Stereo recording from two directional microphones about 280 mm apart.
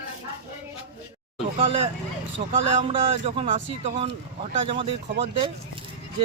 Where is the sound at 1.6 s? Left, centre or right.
Centre.